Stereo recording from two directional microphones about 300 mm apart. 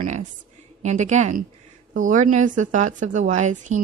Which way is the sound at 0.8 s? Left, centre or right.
Right.